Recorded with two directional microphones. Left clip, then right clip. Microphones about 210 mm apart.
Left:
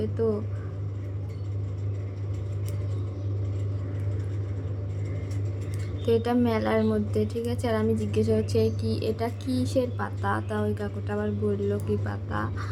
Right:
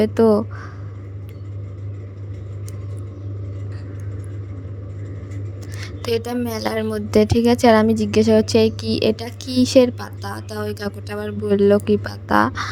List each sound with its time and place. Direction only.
0.0 s a woman's voice: 45° right (ahead or behind)
5.8 s a sound: 45° right (ahead or behind)
6.6 s a woman's voice: 45° right (ahead or behind)
10.0 s a woman's voice: centre (ahead or behind)
10.5 s a woman's voice: 45° right (ahead or behind)